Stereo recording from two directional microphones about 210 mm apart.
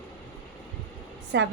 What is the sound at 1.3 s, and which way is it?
Speech, 60° right (ahead or behind).